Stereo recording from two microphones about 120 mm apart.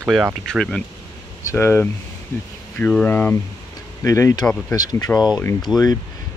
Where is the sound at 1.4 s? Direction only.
20° left (ahead or behind).